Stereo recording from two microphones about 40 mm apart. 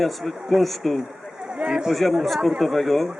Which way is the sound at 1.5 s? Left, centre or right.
Right.